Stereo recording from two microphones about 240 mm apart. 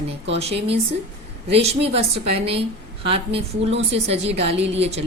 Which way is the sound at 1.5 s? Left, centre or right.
Right.